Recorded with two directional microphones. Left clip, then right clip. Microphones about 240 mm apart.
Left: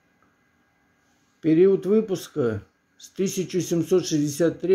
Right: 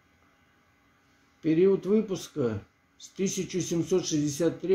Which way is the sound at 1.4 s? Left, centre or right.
Left.